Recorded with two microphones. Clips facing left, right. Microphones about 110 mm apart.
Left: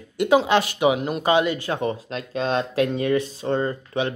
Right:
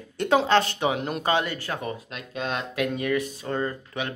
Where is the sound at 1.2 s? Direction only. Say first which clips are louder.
Left 6 dB; 15° left (ahead or behind).